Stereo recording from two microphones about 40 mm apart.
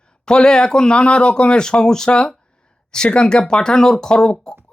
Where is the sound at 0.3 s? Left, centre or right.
Centre.